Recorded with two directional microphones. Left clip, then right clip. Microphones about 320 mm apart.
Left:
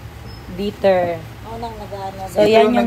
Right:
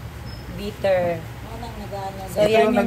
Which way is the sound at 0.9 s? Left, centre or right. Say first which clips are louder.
Left 3 dB; left.